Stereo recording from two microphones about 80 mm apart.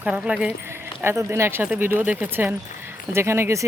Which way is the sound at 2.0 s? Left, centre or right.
Right.